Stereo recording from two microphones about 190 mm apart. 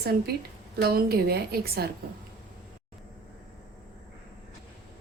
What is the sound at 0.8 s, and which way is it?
A woman's voice, 55° right (ahead or behind).